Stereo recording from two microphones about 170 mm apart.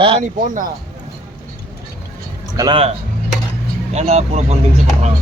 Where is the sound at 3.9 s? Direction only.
40° right (ahead or behind).